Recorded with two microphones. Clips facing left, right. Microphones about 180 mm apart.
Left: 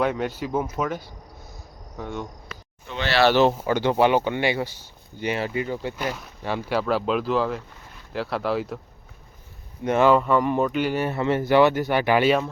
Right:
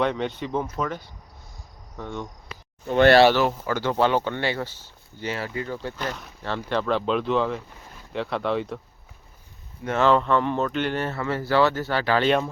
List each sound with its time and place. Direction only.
0.0 s speech: 5° left (ahead or behind)
2.8 s speech: 50° right (ahead or behind)
3.3 s speech: 20° left (ahead or behind); by 8.8 s 5° left (ahead or behind)
9.8 s speech: 15° left (ahead or behind)